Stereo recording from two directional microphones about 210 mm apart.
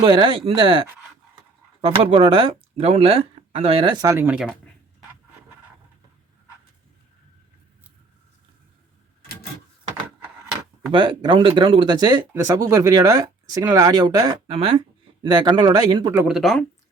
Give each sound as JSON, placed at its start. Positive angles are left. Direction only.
{"t": 0.0, "sound": "speech", "side_deg": -25}
{"t": 10.9, "sound": "speech", "side_deg": -25}
{"t": 16.1, "sound": "speech", "side_deg": -5}